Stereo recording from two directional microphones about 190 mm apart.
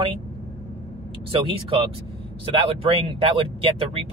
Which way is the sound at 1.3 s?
30° right (ahead or behind).